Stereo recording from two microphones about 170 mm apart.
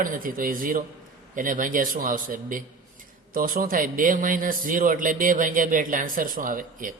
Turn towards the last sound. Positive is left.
turn(degrees=-55)  # may be behind; listen again after turning